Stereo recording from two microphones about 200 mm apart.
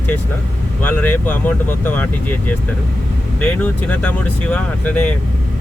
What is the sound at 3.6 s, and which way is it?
Speech, 10° left (ahead or behind).